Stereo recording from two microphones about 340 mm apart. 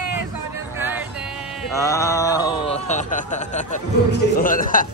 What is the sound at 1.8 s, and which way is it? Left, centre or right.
Speech, centre.